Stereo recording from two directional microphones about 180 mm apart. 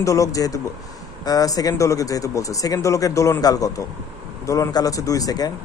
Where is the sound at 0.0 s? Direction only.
20° left (ahead or behind).